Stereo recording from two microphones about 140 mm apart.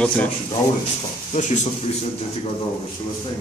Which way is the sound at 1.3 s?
55° left (ahead or behind).